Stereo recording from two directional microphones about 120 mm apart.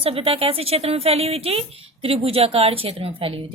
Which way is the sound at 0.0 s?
50° right (ahead or behind).